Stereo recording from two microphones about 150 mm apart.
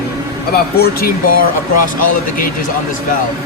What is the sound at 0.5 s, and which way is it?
Speech, 90° left.